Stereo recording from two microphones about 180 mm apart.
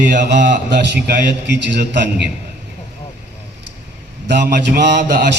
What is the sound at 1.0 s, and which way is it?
Speech, 70° right (ahead or behind).